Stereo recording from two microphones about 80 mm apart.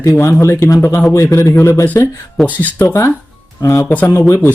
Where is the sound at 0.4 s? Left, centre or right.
Left.